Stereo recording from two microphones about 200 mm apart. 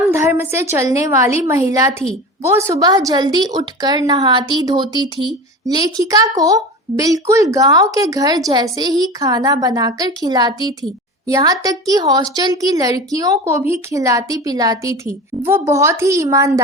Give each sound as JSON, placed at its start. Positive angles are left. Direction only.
{"t": 0.1, "sound": "a woman's voice", "side_deg": -10}